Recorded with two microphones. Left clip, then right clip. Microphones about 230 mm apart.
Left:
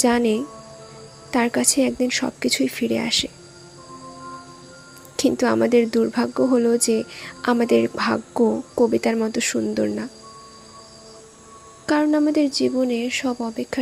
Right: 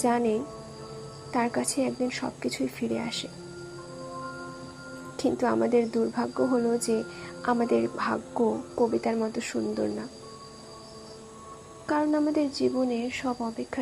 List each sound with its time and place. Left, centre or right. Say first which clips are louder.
0.0 s speech: left 6 dB; left
5.4 s speech: left 6 dB; left
9.7 s speech: left 7 dB; left
11.9 s speech: left 7 dB; left